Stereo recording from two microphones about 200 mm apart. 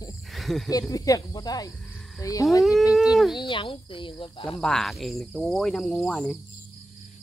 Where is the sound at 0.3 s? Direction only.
Centre (ahead or behind).